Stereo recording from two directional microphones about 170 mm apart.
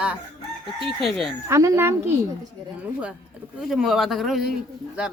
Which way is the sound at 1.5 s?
15° right (ahead or behind).